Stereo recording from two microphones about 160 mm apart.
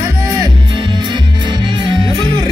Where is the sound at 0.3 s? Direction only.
25° right (ahead or behind).